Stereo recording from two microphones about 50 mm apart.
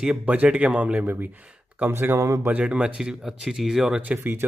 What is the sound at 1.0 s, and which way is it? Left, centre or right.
Speech, right.